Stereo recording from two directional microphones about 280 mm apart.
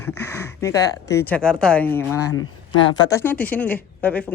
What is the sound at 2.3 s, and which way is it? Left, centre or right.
Speech, left.